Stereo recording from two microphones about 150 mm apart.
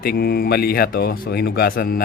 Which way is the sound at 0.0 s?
90° left.